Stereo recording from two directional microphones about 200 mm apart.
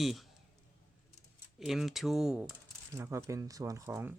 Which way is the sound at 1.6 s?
Centre (ahead or behind).